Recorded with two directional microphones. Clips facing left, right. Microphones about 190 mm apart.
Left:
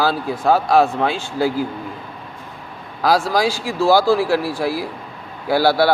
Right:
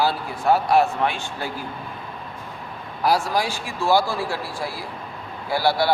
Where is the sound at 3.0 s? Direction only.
90° left.